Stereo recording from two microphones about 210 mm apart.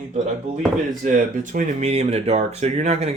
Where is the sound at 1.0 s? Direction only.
40° right (ahead or behind).